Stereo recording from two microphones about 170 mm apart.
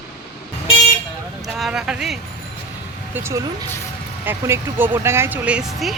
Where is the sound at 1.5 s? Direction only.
5° right (ahead or behind).